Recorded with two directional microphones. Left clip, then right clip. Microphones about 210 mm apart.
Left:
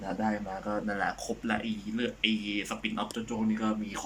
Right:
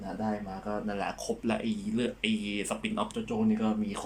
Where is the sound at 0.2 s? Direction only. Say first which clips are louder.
Left 1 dB; 5° right (ahead or behind).